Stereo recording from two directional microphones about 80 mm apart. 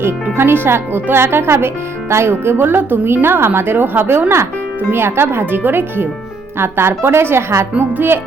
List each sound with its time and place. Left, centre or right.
0.0 s speech: right